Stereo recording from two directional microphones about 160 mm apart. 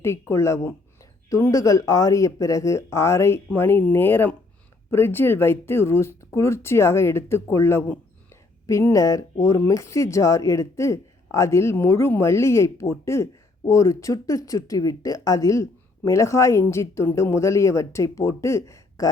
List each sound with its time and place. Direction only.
0.0 s speech: 15° left (ahead or behind)